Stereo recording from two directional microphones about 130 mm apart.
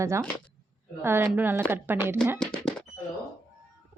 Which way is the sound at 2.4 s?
5° left (ahead or behind).